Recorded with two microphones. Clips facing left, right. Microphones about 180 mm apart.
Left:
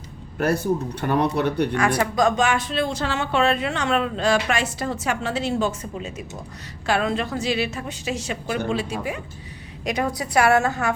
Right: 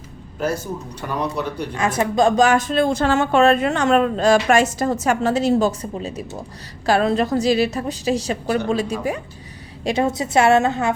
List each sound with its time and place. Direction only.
0.3 s speech: 60° left (ahead or behind)
1.7 s a woman's voice: 20° right (ahead or behind); by 9.2 s 40° right (ahead or behind)
9.8 s a woman's voice: 25° right (ahead or behind)